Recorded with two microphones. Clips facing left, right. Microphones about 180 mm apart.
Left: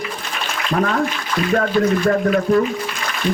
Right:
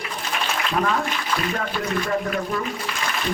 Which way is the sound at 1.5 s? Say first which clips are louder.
Left 9 dB; 55° left (ahead or behind).